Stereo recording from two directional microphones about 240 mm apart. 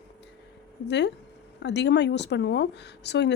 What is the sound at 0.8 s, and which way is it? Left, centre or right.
Speech, left.